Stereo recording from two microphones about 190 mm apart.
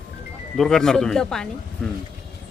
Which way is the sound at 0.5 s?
5° left (ahead or behind).